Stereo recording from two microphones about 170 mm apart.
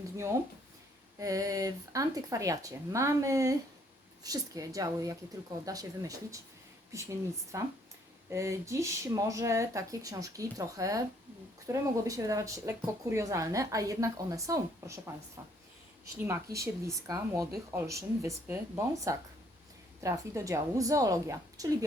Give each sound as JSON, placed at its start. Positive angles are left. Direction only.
{"t": 1.2, "sound": "speech", "side_deg": -20}